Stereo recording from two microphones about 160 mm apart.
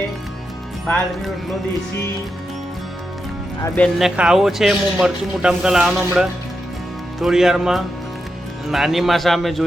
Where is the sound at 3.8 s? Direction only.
Centre (ahead or behind).